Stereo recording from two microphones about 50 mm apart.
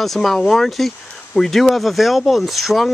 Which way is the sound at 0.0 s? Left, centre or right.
Centre.